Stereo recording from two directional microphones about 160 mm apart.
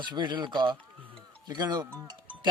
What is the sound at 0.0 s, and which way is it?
Music, 30° right (ahead or behind).